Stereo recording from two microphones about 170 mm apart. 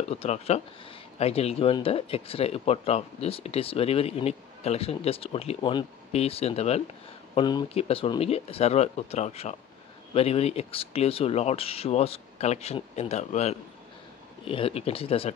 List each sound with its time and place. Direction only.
0.1 s speech: 35° left (ahead or behind)
7.3 s speech: 25° left (ahead or behind)